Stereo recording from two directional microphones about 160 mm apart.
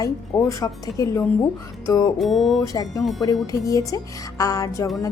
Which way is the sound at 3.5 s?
20° left (ahead or behind).